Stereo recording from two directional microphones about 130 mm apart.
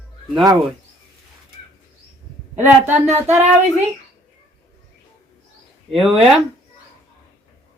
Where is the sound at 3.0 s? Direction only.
55° right (ahead or behind).